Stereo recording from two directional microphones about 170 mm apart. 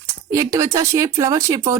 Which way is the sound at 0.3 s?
15° right (ahead or behind).